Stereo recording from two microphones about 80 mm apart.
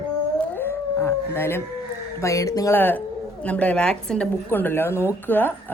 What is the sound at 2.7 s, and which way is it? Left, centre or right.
A woman's voice, left.